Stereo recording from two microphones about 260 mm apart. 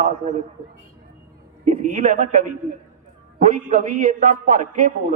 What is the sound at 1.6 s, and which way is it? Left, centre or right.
A man's voice, right.